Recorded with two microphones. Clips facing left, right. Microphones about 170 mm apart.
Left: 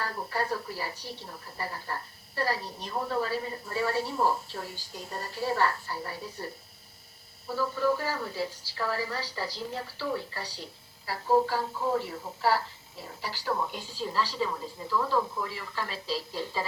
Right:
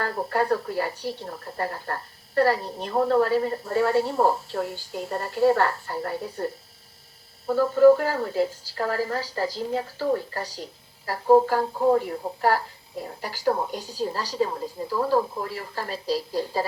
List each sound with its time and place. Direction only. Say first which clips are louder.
0.0 s a woman's voice: right 7 dB; 60° right (ahead or behind)
7.4 s a woman's voice: right 12 dB; 50° right (ahead or behind)
13.2 s a woman's voice: right 6 dB; 45° right (ahead or behind)